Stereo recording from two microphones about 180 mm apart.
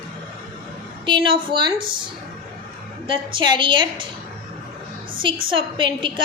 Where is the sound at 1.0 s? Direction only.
25° right (ahead or behind).